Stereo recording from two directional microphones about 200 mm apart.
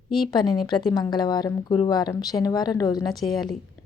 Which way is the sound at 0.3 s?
20° left (ahead or behind).